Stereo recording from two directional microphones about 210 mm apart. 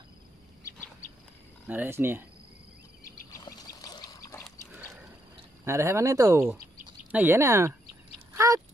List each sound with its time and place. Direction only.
1.7 s speech: 10° right (ahead or behind)
3.3 s dog: 15° left (ahead or behind)
5.7 s speech: 10° right (ahead or behind)